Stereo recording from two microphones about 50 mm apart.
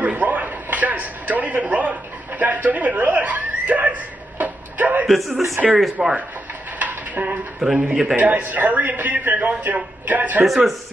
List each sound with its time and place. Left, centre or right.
0.0 s a sound: right
5.0 s speech: centre
6.0 s a man's voice: centre
6.8 s a sound: right
7.6 s a man's voice: centre
8.2 s a man's voice: right
10.4 s speech: centre